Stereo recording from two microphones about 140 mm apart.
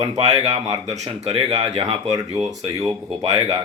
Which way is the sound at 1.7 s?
50° right (ahead or behind).